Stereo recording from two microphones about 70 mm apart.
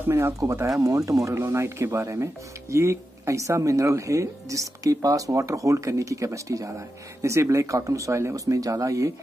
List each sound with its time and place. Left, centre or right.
0.4 s speech: right